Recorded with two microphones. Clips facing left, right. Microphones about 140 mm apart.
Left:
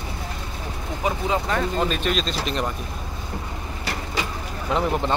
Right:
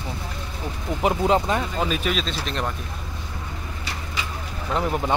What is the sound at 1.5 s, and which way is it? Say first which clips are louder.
Speech: even; 20° right (ahead or behind).